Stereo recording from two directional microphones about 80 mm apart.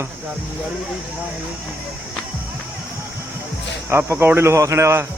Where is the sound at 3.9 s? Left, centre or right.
Right.